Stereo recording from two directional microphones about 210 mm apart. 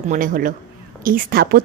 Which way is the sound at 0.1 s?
40° right (ahead or behind).